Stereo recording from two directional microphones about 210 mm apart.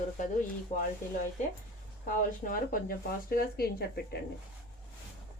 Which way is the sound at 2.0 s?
40° left (ahead or behind).